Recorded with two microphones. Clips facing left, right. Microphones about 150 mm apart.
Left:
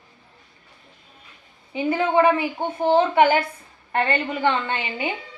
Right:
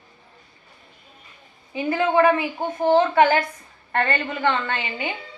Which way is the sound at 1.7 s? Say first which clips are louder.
Even; 10° left (ahead or behind).